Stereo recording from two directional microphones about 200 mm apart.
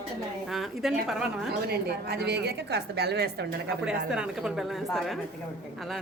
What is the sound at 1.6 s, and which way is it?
A woman's voice, 50° right (ahead or behind).